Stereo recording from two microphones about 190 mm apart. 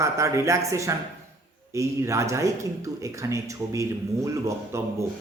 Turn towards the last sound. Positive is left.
turn(degrees=-15)  # may be behind; listen again after turning